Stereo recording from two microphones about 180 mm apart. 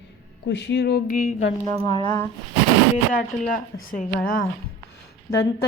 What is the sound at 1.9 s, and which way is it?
Speech, 25° left (ahead or behind).